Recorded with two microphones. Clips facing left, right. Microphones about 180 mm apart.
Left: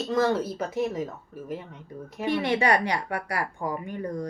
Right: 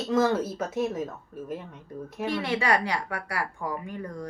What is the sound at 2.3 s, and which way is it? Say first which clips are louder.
Speech: left 4 dB; 20° left (ahead or behind).